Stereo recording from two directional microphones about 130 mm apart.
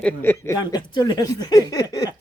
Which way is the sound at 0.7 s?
35° left (ahead or behind).